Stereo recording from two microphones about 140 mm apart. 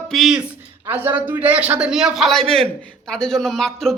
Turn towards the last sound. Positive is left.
turn(degrees=5)  # may be behind; listen again after turning